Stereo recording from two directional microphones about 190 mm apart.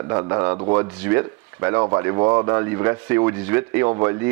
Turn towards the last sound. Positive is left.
turn(degrees=-15)  # may be behind; listen again after turning